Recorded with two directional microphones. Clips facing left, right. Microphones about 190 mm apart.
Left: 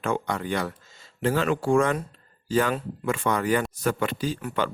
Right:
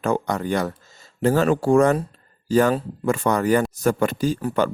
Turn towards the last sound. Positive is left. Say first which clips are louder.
# right 6 dB
turn(degrees=-45)  # may be behind; listen again after turning